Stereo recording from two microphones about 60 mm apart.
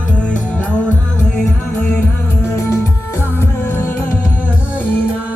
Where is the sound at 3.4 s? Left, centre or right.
Left.